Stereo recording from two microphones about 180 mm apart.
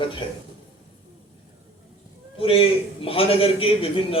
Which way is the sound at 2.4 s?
30° left (ahead or behind).